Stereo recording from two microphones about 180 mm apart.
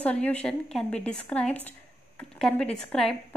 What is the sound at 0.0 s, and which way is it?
A woman's voice, 5° left (ahead or behind).